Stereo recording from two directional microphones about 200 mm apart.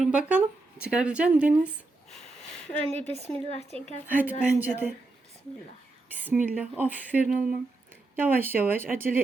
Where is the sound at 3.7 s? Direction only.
30° right (ahead or behind).